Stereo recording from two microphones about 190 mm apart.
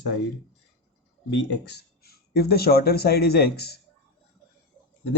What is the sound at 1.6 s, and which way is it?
Speech, 55° left (ahead or behind).